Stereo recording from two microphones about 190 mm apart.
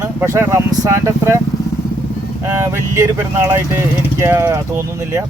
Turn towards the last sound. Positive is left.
turn(degrees=-10)  # may be behind; listen again after turning